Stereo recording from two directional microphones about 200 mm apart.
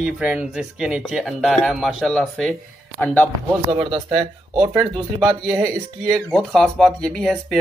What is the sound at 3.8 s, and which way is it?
Speech, 25° right (ahead or behind).